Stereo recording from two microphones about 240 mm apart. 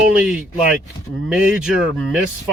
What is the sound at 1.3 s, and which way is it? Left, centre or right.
Speech, centre.